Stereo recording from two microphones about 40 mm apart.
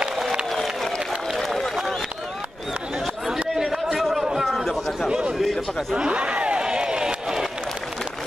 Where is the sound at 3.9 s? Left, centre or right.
Centre.